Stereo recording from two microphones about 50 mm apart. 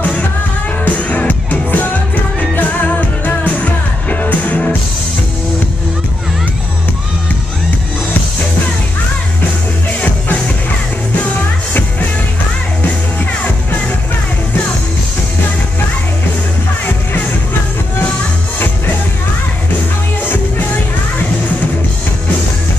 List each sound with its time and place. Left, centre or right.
0.8 s music: left
12.8 s music: left